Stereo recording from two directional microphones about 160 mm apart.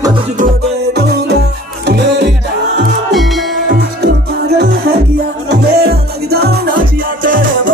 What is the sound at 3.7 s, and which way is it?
Music, 70° right (ahead or behind).